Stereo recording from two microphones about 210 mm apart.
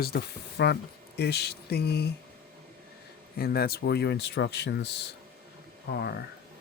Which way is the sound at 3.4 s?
45° left (ahead or behind).